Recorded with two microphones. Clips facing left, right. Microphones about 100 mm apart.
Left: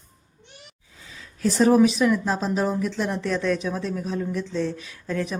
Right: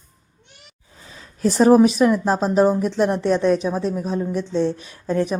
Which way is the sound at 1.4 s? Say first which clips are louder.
Right 4 dB; 45° right (ahead or behind).